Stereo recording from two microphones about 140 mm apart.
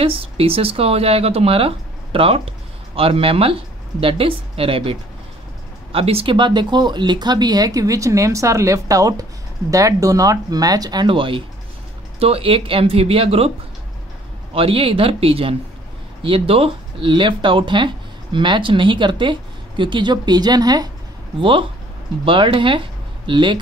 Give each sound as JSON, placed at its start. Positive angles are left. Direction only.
{"t": 0.0, "sound": "speech", "side_deg": -40}
{"t": 14.5, "sound": "speech", "side_deg": -40}